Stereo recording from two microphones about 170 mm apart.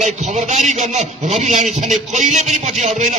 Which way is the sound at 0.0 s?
45° right (ahead or behind).